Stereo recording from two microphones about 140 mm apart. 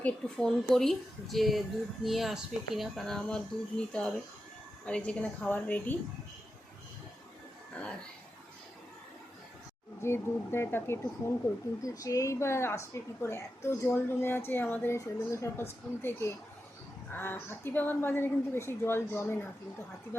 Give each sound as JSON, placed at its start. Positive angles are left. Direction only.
{"t": 0.0, "sound": "a woman's voice", "side_deg": 5}
{"t": 10.0, "sound": "a woman's voice", "side_deg": 20}